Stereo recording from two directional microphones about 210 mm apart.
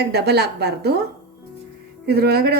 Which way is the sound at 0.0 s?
50° right (ahead or behind).